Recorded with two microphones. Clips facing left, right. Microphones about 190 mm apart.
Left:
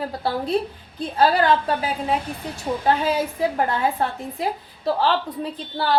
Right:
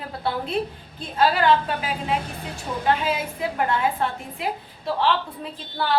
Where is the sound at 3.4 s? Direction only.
35° left (ahead or behind).